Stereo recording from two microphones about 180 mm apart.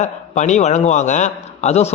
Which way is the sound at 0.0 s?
40° left (ahead or behind).